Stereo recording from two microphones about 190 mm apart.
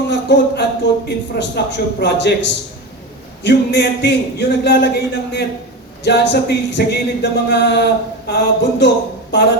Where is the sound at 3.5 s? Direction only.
65° left (ahead or behind).